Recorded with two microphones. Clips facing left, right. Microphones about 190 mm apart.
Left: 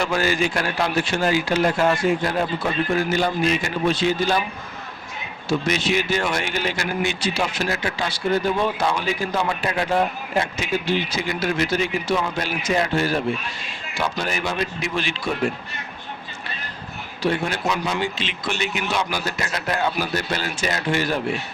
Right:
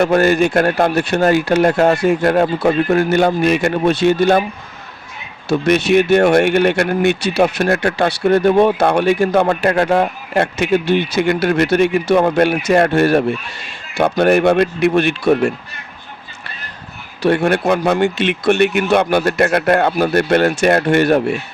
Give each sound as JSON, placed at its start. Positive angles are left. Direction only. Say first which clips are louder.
{"t": 0.0, "sound": "speech", "louder": "right 9 dB", "side_deg": -60}
{"t": 5.5, "sound": "speech", "louder": "right 8 dB", "side_deg": -60}
{"t": 17.2, "sound": "speech", "louder": "right 9 dB", "side_deg": -65}